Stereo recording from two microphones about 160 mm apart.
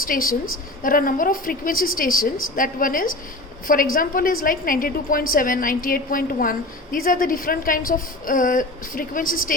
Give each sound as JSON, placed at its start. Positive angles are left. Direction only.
{"t": 0.0, "sound": "a woman's voice", "side_deg": 65}